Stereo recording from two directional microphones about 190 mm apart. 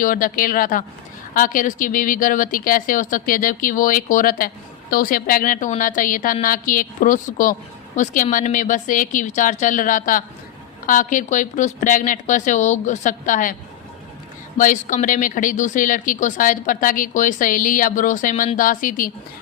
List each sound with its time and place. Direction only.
0.0 s a woman's voice: 45° left (ahead or behind)
14.6 s a woman's voice: 45° left (ahead or behind)